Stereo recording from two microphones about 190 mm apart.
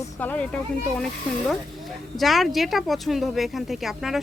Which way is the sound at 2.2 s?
Centre (ahead or behind).